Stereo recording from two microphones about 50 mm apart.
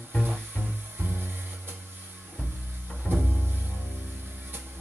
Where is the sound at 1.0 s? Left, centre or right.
Right.